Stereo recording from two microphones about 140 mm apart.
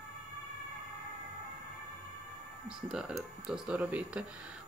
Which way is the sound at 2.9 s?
5° right (ahead or behind).